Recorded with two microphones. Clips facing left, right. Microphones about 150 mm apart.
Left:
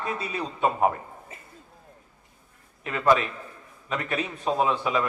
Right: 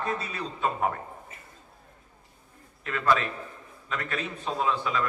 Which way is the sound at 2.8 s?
20° left (ahead or behind).